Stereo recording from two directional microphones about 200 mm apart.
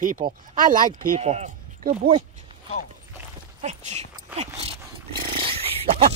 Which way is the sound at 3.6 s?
35° right (ahead or behind).